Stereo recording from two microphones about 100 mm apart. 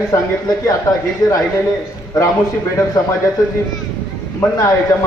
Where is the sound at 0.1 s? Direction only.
35° left (ahead or behind).